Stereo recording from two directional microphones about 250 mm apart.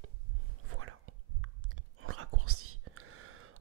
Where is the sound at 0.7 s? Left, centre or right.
Right.